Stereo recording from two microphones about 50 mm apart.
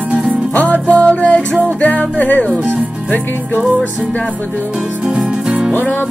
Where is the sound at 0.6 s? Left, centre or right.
Left.